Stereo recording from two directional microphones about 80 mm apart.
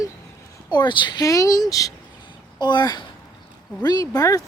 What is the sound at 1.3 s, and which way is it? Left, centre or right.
Speech, left.